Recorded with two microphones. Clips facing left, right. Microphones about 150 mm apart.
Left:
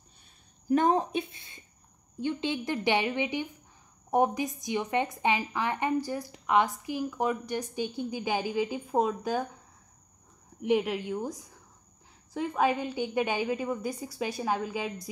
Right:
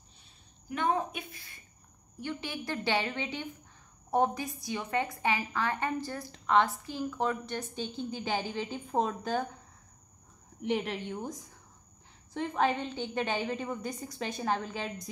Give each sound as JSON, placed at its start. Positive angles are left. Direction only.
{"t": 0.7, "sound": "a sound", "side_deg": 40}
{"t": 2.1, "sound": "a woman's voice", "side_deg": 20}
{"t": 10.6, "sound": "a woman's voice", "side_deg": 10}